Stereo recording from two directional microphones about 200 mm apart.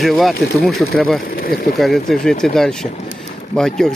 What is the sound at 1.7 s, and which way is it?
Speech, centre (ahead or behind).